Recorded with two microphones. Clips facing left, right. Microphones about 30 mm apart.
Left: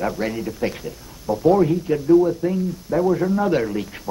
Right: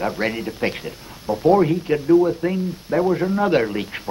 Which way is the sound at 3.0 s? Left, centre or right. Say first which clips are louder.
Even; right.